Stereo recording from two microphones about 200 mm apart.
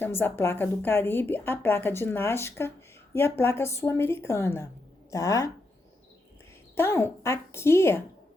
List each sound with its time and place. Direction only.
0.0 s a woman's voice: 10° left (ahead or behind)
6.7 s a woman's voice: 15° left (ahead or behind)